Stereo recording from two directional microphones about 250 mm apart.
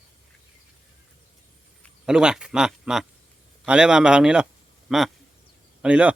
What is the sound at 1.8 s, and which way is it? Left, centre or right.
A man's voice, centre.